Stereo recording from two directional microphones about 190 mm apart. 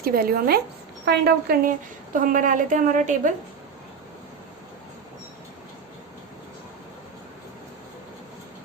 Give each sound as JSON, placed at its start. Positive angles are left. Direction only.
{"t": 0.0, "sound": "a woman's voice", "side_deg": -50}
{"t": 2.1, "sound": "a woman's voice", "side_deg": -45}